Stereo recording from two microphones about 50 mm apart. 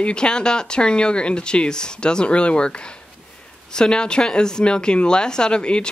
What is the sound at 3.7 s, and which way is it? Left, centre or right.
Speech, centre.